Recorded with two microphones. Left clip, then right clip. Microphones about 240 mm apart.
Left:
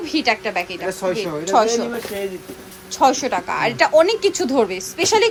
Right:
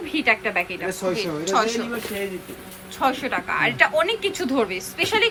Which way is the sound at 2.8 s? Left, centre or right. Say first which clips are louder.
Left 6 dB; left.